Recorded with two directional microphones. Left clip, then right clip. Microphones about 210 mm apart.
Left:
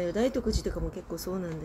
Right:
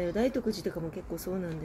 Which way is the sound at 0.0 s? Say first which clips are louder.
Left 1 dB; centre (ahead or behind).